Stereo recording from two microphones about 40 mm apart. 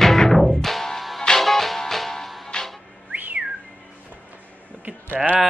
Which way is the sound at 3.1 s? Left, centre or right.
Right.